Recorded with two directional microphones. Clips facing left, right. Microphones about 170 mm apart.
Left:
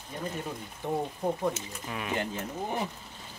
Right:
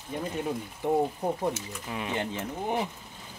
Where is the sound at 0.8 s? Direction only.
15° right (ahead or behind).